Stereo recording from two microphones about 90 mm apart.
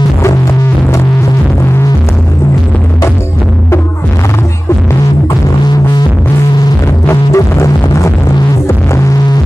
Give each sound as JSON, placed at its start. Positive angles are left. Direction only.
{"t": 7.1, "sound": "music", "side_deg": 35}
{"t": 8.6, "sound": "hum", "side_deg": 35}